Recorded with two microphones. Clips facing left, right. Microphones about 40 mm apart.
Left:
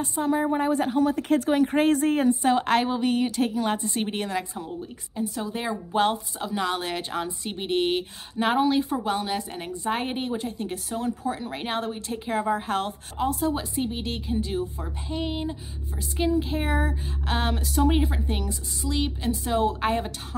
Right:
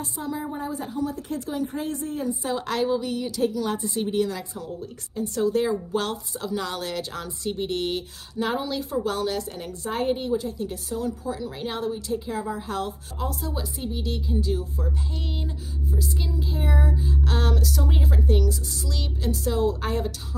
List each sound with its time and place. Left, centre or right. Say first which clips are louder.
0.0 s a woman's voice: left 6 dB; left
2.4 s a woman's voice: left 4 dB; left
5.2 s a woman's voice: right 5 dB; centre
5.5 s a woman's voice: right 5 dB; left
14.9 s speech: left 3 dB; left
15.9 s a woman's voice: left 6 dB; left
17.3 s speech: left 2 dB; left